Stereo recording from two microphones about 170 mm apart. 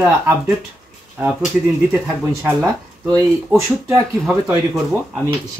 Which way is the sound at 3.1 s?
15° right (ahead or behind).